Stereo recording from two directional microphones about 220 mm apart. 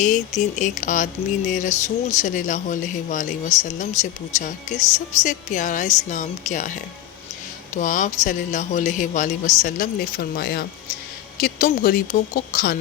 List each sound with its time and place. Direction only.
0.6 s speech: 35° left (ahead or behind)